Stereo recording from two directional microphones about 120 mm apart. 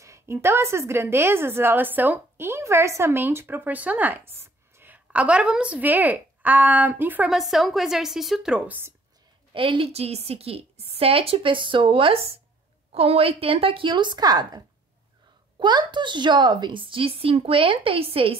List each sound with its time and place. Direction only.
0.0 s a woman's voice: 25° right (ahead or behind)
7.2 s a woman's voice: centre (ahead or behind)
9.5 s a woman's voice: 45° right (ahead or behind)
15.6 s a woman's voice: 40° right (ahead or behind)